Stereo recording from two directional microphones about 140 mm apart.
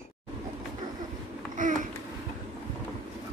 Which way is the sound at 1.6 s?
70° right (ahead or behind).